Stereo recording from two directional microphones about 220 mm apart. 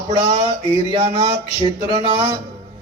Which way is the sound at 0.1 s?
25° right (ahead or behind).